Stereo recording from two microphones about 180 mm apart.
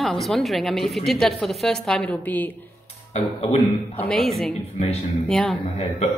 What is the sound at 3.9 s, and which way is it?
Speech, 5° left (ahead or behind).